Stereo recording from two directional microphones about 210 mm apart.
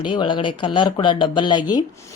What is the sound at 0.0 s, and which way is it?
A woman's voice, 25° left (ahead or behind).